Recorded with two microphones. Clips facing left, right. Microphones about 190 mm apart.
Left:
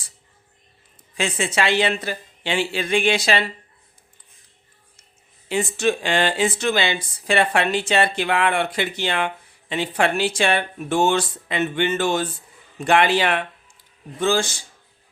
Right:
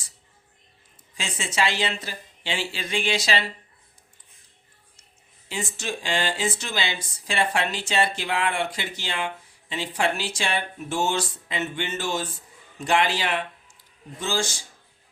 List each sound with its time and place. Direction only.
1.1 s speech: 60° left (ahead or behind)
5.5 s speech: 60° left (ahead or behind)